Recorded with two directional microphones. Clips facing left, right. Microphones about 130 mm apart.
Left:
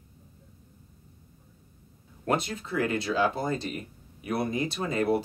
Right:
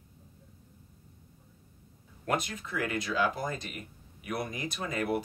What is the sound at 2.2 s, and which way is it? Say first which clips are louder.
Speech: left 4 dB; 30° left (ahead or behind).